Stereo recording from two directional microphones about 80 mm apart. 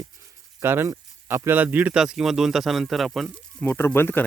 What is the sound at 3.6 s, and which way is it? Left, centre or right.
Speech, left.